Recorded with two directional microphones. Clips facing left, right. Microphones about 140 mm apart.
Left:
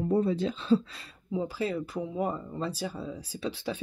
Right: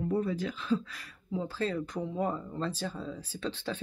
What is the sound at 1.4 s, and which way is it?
Speech, 10° left (ahead or behind).